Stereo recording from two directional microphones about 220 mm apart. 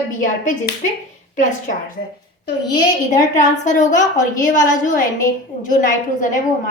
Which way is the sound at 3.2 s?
35° left (ahead or behind).